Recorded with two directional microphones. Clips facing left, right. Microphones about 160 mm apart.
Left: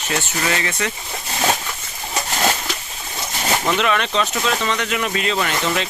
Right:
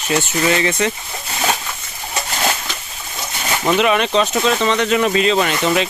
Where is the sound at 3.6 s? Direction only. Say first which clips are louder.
Right 6 dB; 15° right (ahead or behind).